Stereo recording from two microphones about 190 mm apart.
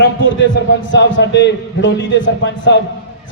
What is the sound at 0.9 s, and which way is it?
A man's voice, 75° left (ahead or behind).